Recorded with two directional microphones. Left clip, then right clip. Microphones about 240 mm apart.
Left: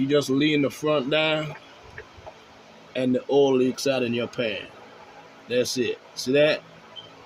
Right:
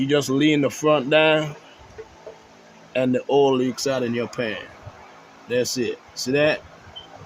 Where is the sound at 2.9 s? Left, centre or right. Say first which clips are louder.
Right 2 dB; right.